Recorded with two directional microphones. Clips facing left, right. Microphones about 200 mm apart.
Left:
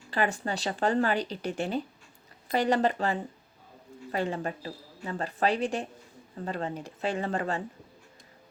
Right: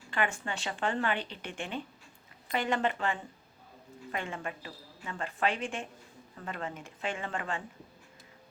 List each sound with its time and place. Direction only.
0.1 s speech: 35° left (ahead or behind)
4.1 s speech: 35° left (ahead or behind)